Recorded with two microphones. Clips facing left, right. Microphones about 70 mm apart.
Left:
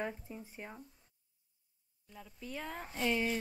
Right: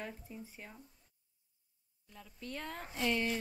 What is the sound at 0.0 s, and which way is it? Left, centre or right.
Speech, centre.